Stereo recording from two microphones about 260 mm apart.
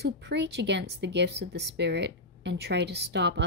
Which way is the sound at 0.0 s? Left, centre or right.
Right.